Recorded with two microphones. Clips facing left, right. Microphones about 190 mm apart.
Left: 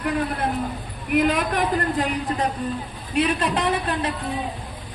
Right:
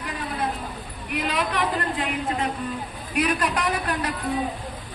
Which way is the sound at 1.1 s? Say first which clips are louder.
Left 6 dB; 50° left (ahead or behind).